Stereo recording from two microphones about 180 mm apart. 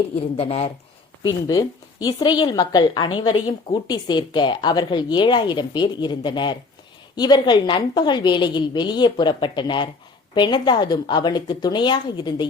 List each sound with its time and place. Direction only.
0.3 s speech: 35° left (ahead or behind)
1.2 s a woman's voice: 20° left (ahead or behind)